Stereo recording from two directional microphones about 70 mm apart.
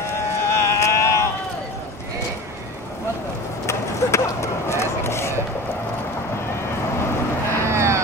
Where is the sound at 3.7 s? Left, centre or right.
Left.